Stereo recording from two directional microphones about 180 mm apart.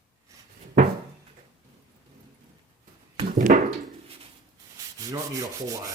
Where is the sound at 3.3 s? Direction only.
45° right (ahead or behind).